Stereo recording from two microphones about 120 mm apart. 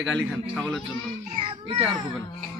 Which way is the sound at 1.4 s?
45° right (ahead or behind).